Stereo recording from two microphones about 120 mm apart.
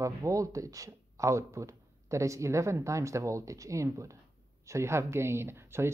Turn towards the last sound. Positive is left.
turn(degrees=-20)  # may be behind; listen again after turning